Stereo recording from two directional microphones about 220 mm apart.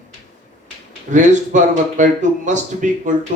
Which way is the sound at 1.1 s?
35° right (ahead or behind).